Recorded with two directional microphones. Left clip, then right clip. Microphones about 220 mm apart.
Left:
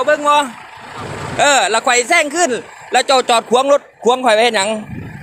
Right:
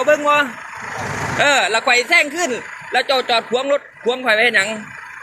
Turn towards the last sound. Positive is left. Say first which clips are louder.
# left 2 dB
turn(degrees=20)  # may be behind; listen again after turning